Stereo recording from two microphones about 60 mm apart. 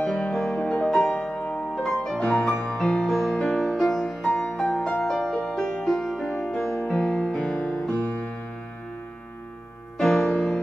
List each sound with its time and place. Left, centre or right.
0.3 s music: centre
8.0 s music: left
9.9 s music: centre